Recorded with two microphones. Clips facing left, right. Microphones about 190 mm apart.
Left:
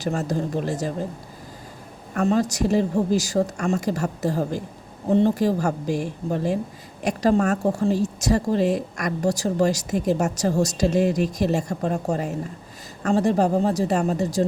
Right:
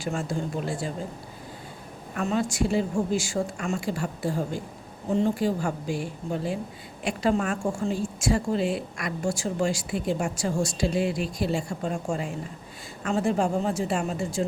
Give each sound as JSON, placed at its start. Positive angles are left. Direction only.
{"t": 0.0, "sound": "a woman's voice", "side_deg": 40}
{"t": 2.1, "sound": "a woman's voice", "side_deg": 40}